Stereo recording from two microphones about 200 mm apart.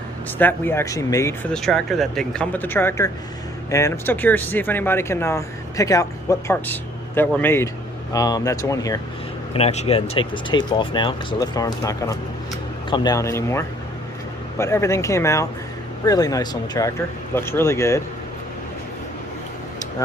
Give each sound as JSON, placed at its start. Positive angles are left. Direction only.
{"t": 0.3, "sound": "speech", "side_deg": 10}
{"t": 9.5, "sound": "speech", "side_deg": 30}